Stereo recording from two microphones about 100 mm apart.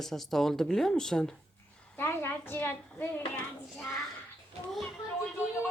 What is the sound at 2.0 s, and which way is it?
A woman's voice, 25° left (ahead or behind).